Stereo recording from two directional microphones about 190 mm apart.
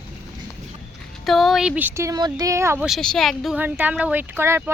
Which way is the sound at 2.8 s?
Centre (ahead or behind).